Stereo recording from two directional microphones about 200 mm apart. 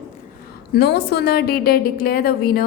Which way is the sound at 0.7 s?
55° left (ahead or behind).